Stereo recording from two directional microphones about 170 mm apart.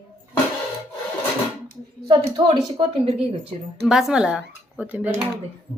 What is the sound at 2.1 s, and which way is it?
A woman's voice, 25° right (ahead or behind).